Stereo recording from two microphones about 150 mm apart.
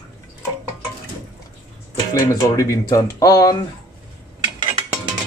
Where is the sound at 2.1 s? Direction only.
20° left (ahead or behind).